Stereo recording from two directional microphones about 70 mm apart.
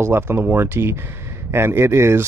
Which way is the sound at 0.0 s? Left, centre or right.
Right.